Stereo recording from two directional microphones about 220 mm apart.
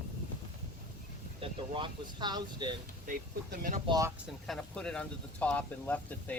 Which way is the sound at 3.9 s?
15° right (ahead or behind).